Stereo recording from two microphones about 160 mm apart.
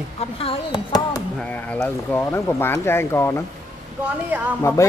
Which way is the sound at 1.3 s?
10° left (ahead or behind).